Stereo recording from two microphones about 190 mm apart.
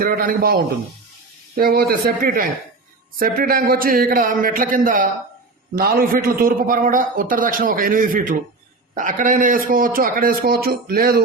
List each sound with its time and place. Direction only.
0.0 s a man's voice: 50° right (ahead or behind)